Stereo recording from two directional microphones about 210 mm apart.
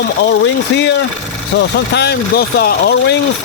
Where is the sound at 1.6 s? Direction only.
55° left (ahead or behind).